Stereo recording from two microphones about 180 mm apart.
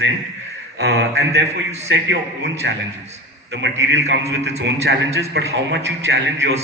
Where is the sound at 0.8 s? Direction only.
75° right (ahead or behind).